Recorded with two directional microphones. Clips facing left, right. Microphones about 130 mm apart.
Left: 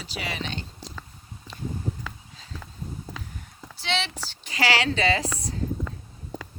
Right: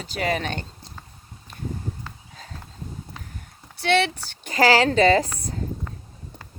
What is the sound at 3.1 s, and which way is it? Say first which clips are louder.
Clip-clop: left 3 dB; 90° left.